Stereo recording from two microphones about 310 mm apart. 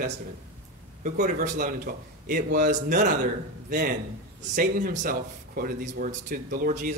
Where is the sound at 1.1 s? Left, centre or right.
Right.